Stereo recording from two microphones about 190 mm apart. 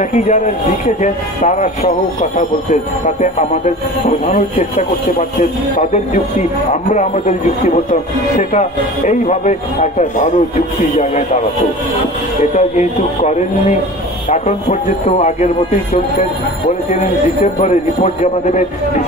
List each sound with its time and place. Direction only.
0.1 s speech: 40° left (ahead or behind)
6.7 s speech: 40° left (ahead or behind)
12.5 s speech: 40° left (ahead or behind)